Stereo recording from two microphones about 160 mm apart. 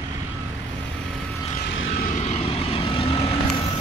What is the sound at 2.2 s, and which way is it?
Vehicle, 40° left (ahead or behind).